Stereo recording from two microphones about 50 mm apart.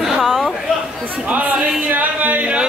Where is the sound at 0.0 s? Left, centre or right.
Centre.